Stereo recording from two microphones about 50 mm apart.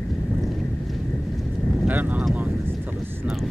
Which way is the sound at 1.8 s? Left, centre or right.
Right.